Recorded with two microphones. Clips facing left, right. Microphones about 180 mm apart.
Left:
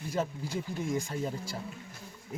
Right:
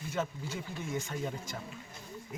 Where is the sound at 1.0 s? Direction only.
30° left (ahead or behind).